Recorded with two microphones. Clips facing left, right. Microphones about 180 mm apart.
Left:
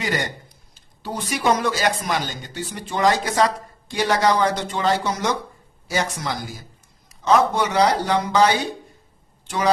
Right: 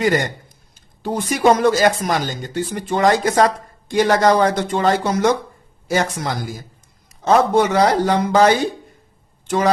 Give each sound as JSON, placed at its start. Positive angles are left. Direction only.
{"t": 0.0, "sound": "a man's voice", "side_deg": -50}